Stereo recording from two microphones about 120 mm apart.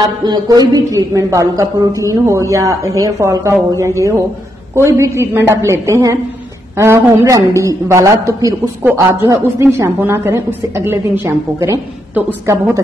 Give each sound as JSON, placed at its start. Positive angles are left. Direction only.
{"t": 0.2, "sound": "a woman's voice", "side_deg": -35}
{"t": 4.7, "sound": "a woman's voice", "side_deg": -25}